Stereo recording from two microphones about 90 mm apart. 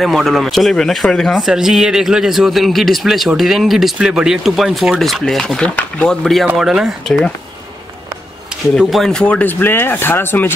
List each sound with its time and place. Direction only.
0.0 s a man's voice: centre (ahead or behind)
6.5 s a man's voice: 5° right (ahead or behind)
7.1 s speech: 10° left (ahead or behind)
8.7 s a man's voice: centre (ahead or behind)
9.1 s speech: 15° left (ahead or behind)